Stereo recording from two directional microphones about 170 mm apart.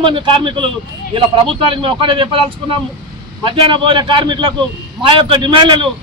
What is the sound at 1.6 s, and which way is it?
Speech, 30° right (ahead or behind).